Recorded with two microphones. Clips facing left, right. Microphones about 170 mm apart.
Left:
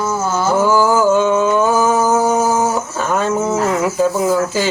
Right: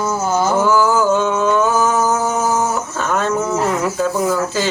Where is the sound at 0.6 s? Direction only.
10° left (ahead or behind).